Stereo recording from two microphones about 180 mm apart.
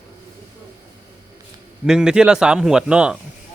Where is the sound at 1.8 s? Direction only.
5° right (ahead or behind).